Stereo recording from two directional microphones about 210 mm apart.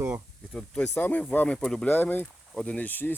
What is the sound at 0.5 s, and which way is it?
Speech, 5° left (ahead or behind).